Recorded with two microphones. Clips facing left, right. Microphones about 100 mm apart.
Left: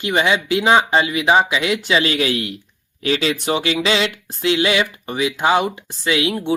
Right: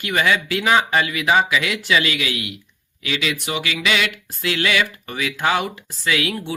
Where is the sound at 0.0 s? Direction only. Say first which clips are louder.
Left 2 dB; 25° left (ahead or behind).